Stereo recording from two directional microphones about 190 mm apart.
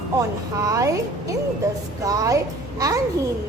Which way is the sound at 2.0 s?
20° right (ahead or behind).